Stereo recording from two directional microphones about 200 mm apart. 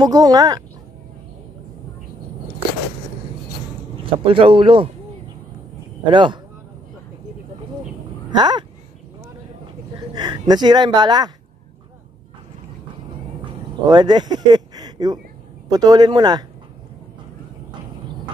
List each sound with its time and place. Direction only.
0.0 s speech: 20° right (ahead or behind)
3.9 s speech: 25° right (ahead or behind)
6.0 s speech: 25° right (ahead or behind)
8.3 s a sound: 20° right (ahead or behind)
10.1 s speech: 20° right (ahead or behind)
13.8 s speech: 20° right (ahead or behind)